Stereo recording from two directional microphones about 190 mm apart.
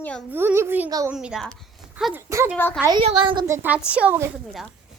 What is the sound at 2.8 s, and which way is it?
Speech, 20° right (ahead or behind).